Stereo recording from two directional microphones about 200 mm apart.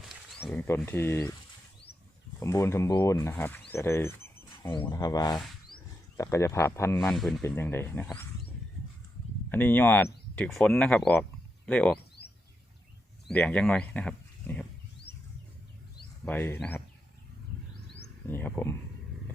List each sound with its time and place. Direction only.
0.9 s speech: 10° left (ahead or behind)
2.4 s speech: 15° left (ahead or behind)
3.7 s a sound: 10° left (ahead or behind)
4.9 s speech: 15° left (ahead or behind); by 7.4 s centre (ahead or behind)
7.4 s speech: 10° left (ahead or behind)
9.5 s speech: 10° left (ahead or behind)
12.2 s bird: 15° right (ahead or behind)
13.2 s speech: 5° left (ahead or behind)
16.2 s speech: 10° left (ahead or behind)
17.9 s a sound: 10° left (ahead or behind)